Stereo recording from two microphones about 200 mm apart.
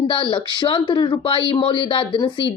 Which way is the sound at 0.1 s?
25° left (ahead or behind).